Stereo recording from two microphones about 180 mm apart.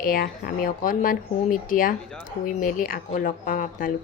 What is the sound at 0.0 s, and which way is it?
Speech, 55° left (ahead or behind).